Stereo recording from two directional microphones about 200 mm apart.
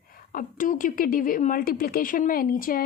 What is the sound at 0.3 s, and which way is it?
A woman's voice, 45° left (ahead or behind).